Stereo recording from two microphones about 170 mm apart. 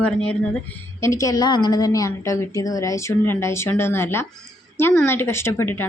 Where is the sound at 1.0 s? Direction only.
20° left (ahead or behind).